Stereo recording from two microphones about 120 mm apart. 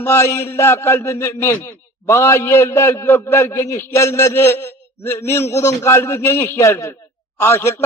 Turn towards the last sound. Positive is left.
turn(degrees=20)  # may be behind; listen again after turning